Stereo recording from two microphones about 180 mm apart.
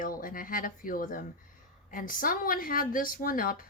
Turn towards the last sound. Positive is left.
turn(degrees=50)  # may be behind; listen again after turning